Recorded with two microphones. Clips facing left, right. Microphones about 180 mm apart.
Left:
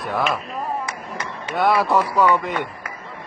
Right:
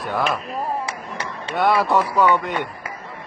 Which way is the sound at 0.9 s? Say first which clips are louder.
Even; 30° right (ahead or behind).